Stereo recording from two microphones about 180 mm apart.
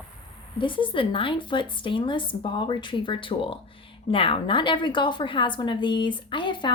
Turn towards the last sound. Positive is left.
turn(degrees=25)  # may be behind; listen again after turning